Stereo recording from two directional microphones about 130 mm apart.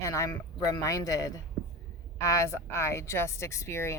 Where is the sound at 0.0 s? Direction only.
25° left (ahead or behind).